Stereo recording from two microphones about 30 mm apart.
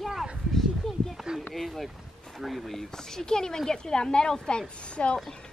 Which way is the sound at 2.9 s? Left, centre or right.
Centre.